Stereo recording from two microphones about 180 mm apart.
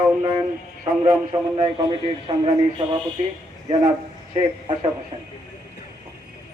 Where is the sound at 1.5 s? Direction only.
30° right (ahead or behind).